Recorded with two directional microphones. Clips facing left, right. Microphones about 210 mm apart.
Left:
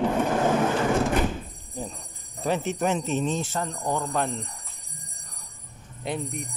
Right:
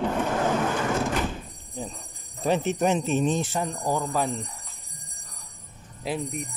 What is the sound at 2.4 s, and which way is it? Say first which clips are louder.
A man's voice: right 2 dB; 20° right (ahead or behind).